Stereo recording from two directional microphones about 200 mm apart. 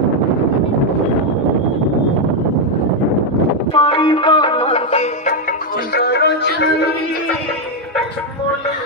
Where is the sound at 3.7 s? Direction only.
25° left (ahead or behind).